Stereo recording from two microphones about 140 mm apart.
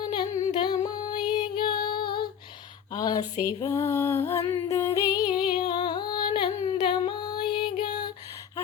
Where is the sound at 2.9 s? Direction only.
30° left (ahead or behind).